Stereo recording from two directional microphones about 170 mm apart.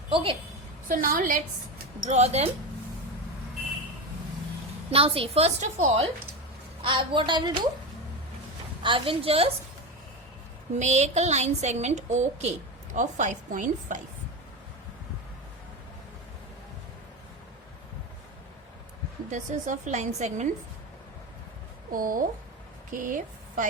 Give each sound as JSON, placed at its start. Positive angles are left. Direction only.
{"t": 0.1, "sound": "a woman's voice", "side_deg": -30}
{"t": 0.9, "sound": "a woman's voice", "side_deg": -55}
{"t": 2.0, "sound": "a woman's voice", "side_deg": -40}
{"t": 4.9, "sound": "a woman's voice", "side_deg": -35}
{"t": 6.8, "sound": "a woman's voice", "side_deg": -30}
{"t": 8.8, "sound": "a woman's voice", "side_deg": -30}
{"t": 10.8, "sound": "a woman's voice", "side_deg": -45}
{"t": 19.3, "sound": "a woman's voice", "side_deg": -45}
{"t": 21.9, "sound": "a woman's voice", "side_deg": -55}